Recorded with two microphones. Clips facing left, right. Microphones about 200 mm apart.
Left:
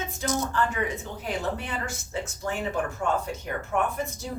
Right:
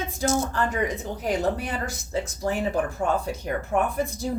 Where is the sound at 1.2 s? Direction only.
40° right (ahead or behind).